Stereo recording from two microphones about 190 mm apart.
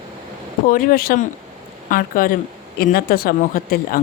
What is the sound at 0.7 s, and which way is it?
A woman's voice, 50° left (ahead or behind).